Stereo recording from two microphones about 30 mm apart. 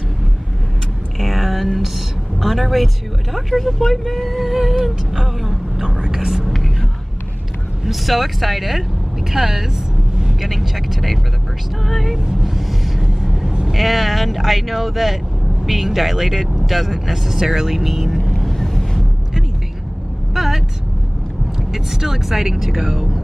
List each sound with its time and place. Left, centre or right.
1.2 s a sound: centre
2.4 s speech: centre
4.5 s music: centre
5.4 s a sound: centre
5.9 s whispering: right
6.1 s whispering: centre
6.4 s music: centre
7.9 s speech: centre
11.8 s speech: centre
12.4 s a sound: centre
13.7 s speech: centre
18.5 s boat: centre
20.3 s vehicle: centre
21.7 s speech: centre